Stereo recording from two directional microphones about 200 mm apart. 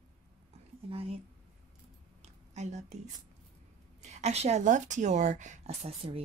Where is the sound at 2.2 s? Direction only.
35° right (ahead or behind).